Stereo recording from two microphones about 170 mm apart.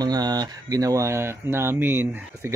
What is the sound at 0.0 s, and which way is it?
Speech, 25° right (ahead or behind).